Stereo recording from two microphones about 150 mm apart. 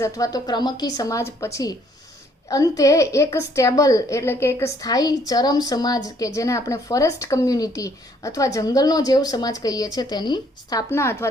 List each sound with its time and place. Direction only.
0.0 s a woman's voice: 25° left (ahead or behind)